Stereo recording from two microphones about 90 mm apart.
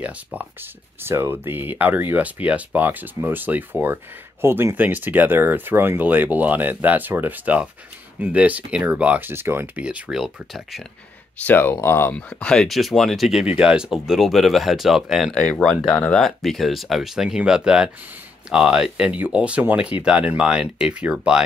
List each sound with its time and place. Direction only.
0.0 s speech: 15° right (ahead or behind)
1.0 s speech: 30° right (ahead or behind)
9.8 s speech: 10° right (ahead or behind)
11.4 s speech: 20° left (ahead or behind)
12.4 s speech: 10° left (ahead or behind)
15.3 s speech: 10° left (ahead or behind); by 21.4 s 10° right (ahead or behind)